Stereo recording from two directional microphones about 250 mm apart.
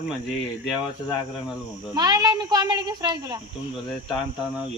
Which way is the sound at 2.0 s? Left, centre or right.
Centre.